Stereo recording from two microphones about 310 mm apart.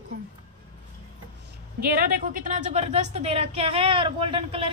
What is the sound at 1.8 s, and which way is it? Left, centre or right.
A woman's voice, right.